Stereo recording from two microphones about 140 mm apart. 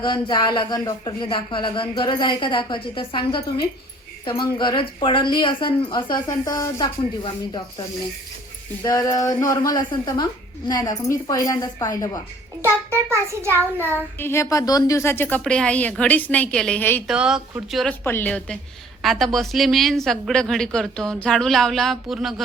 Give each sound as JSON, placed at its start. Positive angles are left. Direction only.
{"t": 0.0, "sound": "speech", "side_deg": 35}
{"t": 8.8, "sound": "a woman's voice", "side_deg": 25}
{"t": 12.6, "sound": "child singing", "side_deg": -20}
{"t": 14.2, "sound": "a woman's voice", "side_deg": 20}
{"t": 17.1, "sound": "a woman's voice", "side_deg": -5}
{"t": 18.0, "sound": "a woman's voice", "side_deg": 15}